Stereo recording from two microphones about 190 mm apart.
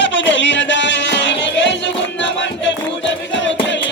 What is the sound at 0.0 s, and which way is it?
Music, 75° left (ahead or behind).